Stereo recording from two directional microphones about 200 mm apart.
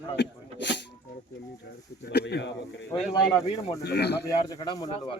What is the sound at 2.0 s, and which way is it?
Speech, 55° left (ahead or behind).